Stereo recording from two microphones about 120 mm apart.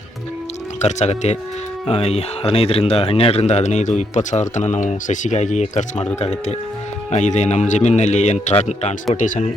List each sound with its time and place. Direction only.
0.8 s speech: 70° left (ahead or behind)
1.9 s speech: 60° left (ahead or behind); by 6.1 s 80° left
7.1 s speech: 70° left (ahead or behind)
9.1 s speech: 90° left